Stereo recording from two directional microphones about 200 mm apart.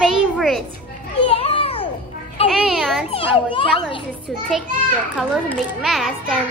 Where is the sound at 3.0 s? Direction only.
30° left (ahead or behind).